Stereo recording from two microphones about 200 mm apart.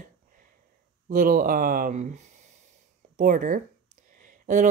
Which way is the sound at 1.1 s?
45° right (ahead or behind).